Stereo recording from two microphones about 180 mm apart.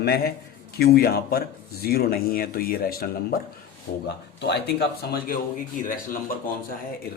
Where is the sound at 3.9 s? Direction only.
75° left (ahead or behind); by 5.3 s 60° left (ahead or behind).